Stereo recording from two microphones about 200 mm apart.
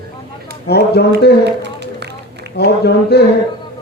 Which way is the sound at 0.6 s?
55° left (ahead or behind).